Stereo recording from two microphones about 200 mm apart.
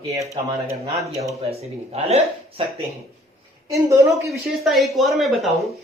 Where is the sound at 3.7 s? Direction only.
15° right (ahead or behind).